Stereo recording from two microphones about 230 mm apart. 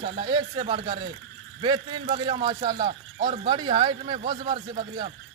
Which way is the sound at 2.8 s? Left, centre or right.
Right.